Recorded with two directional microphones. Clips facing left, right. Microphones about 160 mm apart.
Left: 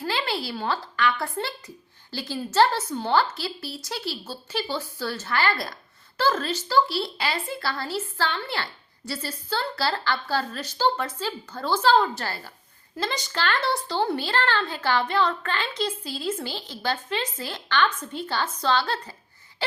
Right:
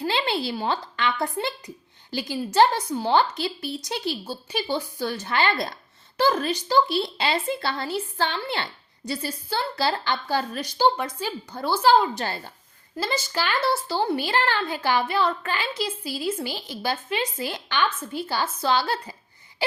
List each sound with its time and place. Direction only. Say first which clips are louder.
0.0 s a woman's voice: right 3 dB; 20° right (ahead or behind)
13.0 s a woman's voice: right 2 dB; 5° right (ahead or behind)